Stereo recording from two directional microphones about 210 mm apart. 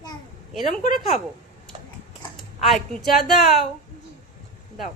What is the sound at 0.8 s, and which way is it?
Speech, 35° left (ahead or behind).